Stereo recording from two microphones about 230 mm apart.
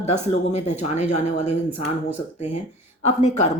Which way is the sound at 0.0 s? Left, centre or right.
Left.